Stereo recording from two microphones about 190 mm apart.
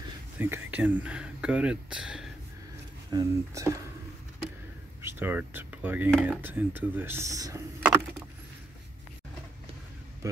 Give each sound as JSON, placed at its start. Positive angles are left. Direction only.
{"t": 0.4, "sound": "speech", "side_deg": -10}
{"t": 3.1, "sound": "speech", "side_deg": -20}
{"t": 5.0, "sound": "speech", "side_deg": -10}